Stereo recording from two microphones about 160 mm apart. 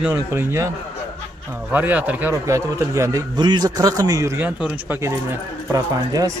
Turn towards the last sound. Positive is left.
turn(degrees=-20)  # may be behind; listen again after turning